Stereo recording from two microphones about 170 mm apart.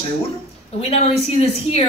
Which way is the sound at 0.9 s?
35° left (ahead or behind).